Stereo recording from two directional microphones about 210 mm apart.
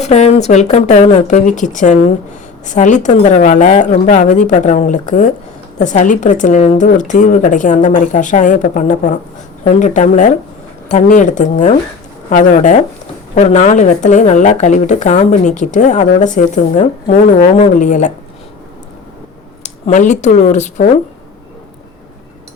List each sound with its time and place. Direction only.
0.0 s speech: 30° left (ahead or behind)
19.6 s speech: 35° left (ahead or behind)